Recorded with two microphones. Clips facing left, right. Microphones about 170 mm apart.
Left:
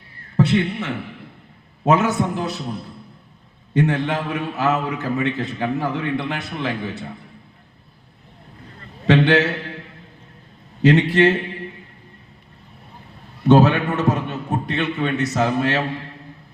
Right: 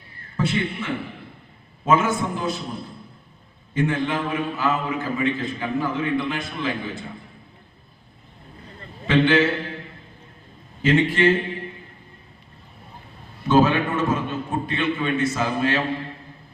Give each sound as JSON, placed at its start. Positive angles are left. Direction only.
{"t": 0.3, "sound": "a man's voice", "side_deg": 70}
{"t": 3.8, "sound": "a man's voice", "side_deg": 70}
{"t": 9.0, "sound": "a man's voice", "side_deg": 75}
{"t": 10.8, "sound": "a man's voice", "side_deg": 70}
{"t": 13.4, "sound": "a sound", "side_deg": 70}